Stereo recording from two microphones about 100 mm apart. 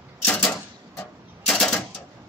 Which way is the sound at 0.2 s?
15° left (ahead or behind).